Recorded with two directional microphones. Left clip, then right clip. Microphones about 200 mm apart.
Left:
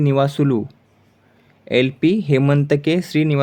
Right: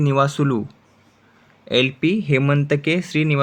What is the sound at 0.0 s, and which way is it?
Speech, 15° left (ahead or behind).